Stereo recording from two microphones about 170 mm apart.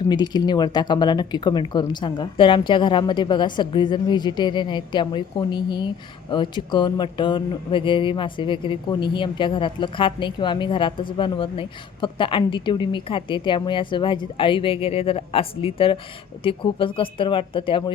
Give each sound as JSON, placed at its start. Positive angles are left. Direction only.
{"t": 0.1, "sound": "speech", "side_deg": 25}